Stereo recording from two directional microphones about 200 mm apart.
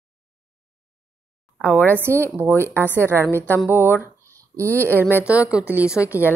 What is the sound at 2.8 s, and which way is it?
Speech, 10° left (ahead or behind).